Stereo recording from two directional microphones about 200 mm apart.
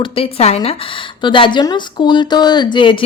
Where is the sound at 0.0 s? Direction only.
30° left (ahead or behind).